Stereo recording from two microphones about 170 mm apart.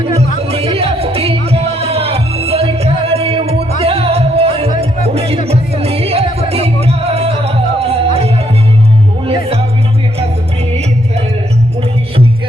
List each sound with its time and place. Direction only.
0.5 s music: 35° right (ahead or behind)